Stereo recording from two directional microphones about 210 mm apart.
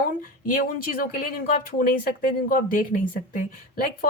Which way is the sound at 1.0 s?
40° left (ahead or behind).